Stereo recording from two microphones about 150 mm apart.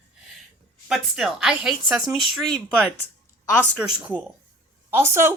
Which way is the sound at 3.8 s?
10° right (ahead or behind).